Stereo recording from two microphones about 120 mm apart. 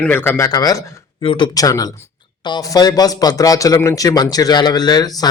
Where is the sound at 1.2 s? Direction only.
40° left (ahead or behind).